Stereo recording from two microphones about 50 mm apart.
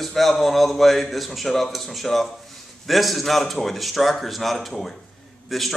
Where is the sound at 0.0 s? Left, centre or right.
Centre.